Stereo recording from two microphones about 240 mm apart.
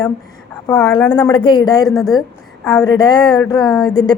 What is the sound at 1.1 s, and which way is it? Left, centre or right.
Speech, centre.